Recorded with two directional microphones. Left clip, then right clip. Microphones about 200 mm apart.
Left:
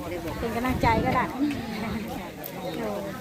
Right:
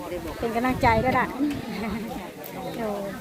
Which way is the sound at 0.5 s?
55° right (ahead or behind).